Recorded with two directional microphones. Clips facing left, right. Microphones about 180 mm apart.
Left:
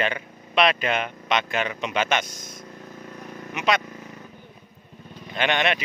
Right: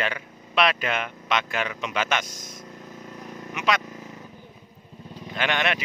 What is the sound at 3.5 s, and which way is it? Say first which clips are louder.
Speech: left 2 dB; 25° left (ahead or behind).